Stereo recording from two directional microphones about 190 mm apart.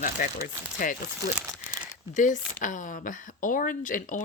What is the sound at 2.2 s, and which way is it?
Speech, 40° left (ahead or behind).